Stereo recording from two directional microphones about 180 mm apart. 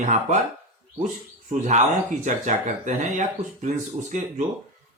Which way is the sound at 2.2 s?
45° right (ahead or behind).